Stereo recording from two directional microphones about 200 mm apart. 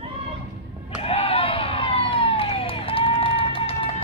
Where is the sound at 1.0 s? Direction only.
30° left (ahead or behind).